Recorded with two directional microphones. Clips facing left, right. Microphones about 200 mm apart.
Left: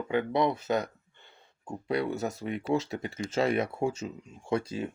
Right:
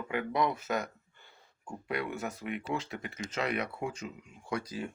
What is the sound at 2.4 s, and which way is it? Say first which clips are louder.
Speech: left 6 dB; 30° left (ahead or behind).